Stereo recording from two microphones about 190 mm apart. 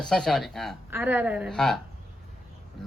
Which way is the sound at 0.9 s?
10° right (ahead or behind).